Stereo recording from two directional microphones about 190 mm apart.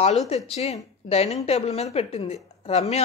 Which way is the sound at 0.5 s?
35° left (ahead or behind).